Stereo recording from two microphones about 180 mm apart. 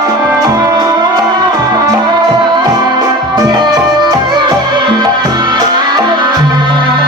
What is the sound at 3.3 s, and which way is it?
Music, 25° right (ahead or behind).